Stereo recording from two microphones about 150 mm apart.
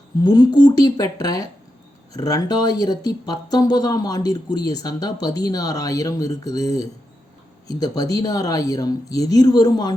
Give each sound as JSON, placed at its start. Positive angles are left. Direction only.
{"t": 0.2, "sound": "speech", "side_deg": 25}